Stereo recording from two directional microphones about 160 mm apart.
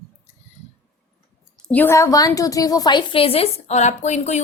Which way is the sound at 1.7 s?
15° left (ahead or behind).